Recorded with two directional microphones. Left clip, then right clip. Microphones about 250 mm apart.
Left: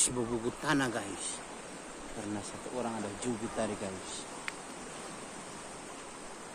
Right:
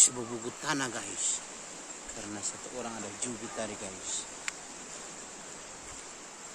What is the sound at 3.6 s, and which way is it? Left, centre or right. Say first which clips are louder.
Speech: left 2 dB; centre.